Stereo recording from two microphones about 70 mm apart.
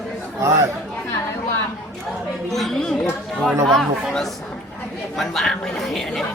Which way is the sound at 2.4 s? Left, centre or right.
Centre.